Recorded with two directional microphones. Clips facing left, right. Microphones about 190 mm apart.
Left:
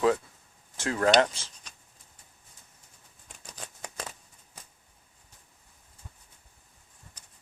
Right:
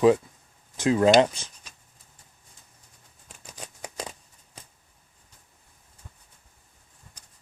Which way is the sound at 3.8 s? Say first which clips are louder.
Right 4 dB; 15° right (ahead or behind).